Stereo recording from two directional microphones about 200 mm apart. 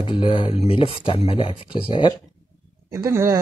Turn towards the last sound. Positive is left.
turn(degrees=-15)  # may be behind; listen again after turning